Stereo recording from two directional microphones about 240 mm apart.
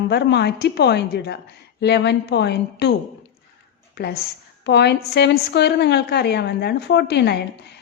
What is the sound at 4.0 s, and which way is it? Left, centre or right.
A woman's voice, left.